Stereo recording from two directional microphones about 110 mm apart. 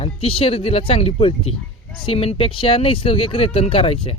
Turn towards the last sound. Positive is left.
turn(degrees=60)  # may be behind; listen again after turning